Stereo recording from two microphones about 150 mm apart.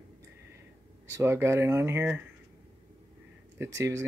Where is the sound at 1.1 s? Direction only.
15° right (ahead or behind).